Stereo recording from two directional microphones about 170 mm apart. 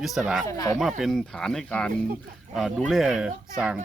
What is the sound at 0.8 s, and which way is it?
Speech, centre (ahead or behind).